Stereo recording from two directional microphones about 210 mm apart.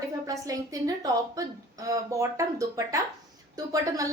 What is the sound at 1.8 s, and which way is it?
Speech, 15° right (ahead or behind).